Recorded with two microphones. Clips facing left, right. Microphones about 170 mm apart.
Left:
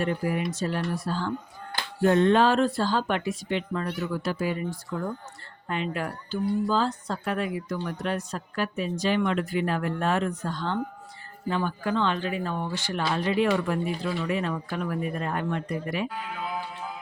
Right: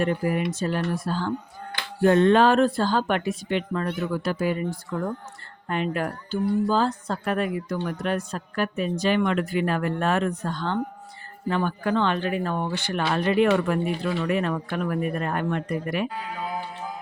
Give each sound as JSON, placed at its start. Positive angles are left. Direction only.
{"t": 0.0, "sound": "speech", "side_deg": -50}
{"t": 2.0, "sound": "speech", "side_deg": -65}
{"t": 16.1, "sound": "music", "side_deg": -35}